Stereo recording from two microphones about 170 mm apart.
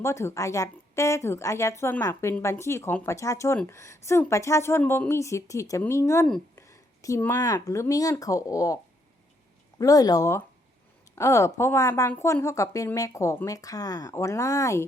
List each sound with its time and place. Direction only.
0.0 s a woman's voice: 15° left (ahead or behind)